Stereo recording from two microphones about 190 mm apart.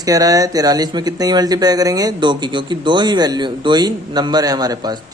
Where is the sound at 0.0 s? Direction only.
20° right (ahead or behind).